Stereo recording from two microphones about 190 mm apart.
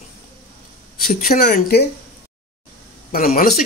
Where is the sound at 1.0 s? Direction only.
50° left (ahead or behind).